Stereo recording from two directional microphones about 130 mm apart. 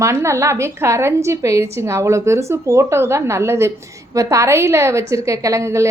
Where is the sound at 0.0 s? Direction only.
20° right (ahead or behind).